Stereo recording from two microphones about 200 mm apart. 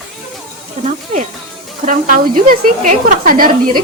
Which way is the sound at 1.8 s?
40° right (ahead or behind).